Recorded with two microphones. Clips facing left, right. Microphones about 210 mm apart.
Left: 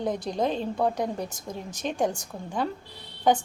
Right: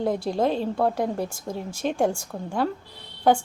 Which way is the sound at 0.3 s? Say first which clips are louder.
Right 4 dB; 45° right (ahead or behind).